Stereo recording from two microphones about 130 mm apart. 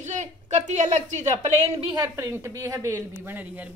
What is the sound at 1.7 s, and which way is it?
Speech, 40° right (ahead or behind).